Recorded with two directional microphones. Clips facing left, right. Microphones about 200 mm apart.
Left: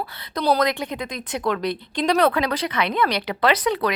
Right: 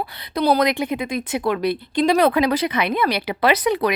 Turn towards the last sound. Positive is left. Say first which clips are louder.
# right 2 dB
turn(degrees=-10)  # may be behind; listen again after turning